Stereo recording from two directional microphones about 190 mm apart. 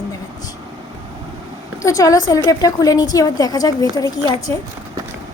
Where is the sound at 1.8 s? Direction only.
15° left (ahead or behind).